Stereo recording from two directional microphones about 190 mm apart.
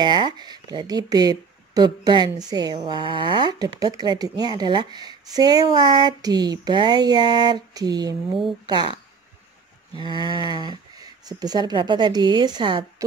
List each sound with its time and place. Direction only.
0.0 s speech: 20° right (ahead or behind)
9.9 s speech: 25° right (ahead or behind)